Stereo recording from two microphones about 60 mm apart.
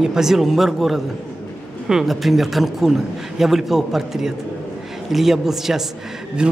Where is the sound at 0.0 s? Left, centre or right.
Centre.